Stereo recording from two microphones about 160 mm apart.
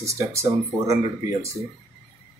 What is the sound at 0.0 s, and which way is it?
Speech, 20° right (ahead or behind).